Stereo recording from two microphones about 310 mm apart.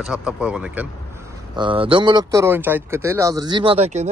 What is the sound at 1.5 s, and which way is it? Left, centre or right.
A man's voice, centre.